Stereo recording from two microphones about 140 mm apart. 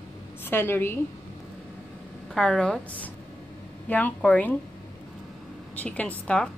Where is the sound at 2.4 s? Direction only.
5° left (ahead or behind).